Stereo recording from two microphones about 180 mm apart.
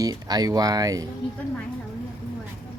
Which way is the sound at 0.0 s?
20° right (ahead or behind).